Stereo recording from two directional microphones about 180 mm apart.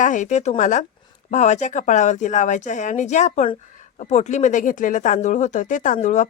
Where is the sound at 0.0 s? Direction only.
45° left (ahead or behind).